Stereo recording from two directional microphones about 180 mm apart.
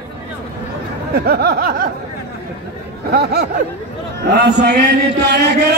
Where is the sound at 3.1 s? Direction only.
65° right (ahead or behind).